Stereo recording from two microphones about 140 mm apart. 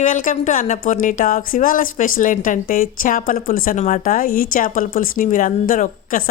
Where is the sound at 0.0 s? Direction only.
70° left (ahead or behind).